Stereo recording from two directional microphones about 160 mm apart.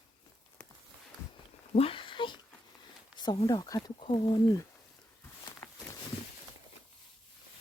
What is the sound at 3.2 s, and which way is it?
Speech, 25° left (ahead or behind).